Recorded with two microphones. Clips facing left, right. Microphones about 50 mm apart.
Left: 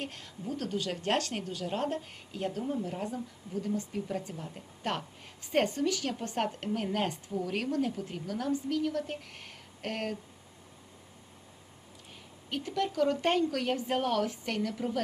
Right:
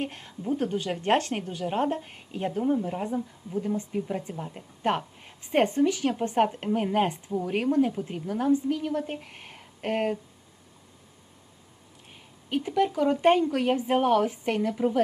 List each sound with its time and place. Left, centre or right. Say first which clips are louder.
0.0 s a woman's voice: right 6 dB; right
12.5 s a woman's voice: right 7 dB; right